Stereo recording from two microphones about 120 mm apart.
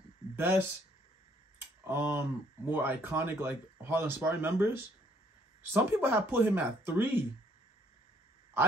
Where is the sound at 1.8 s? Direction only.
20° right (ahead or behind).